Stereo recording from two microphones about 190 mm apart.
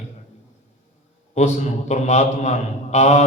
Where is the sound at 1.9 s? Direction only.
35° left (ahead or behind).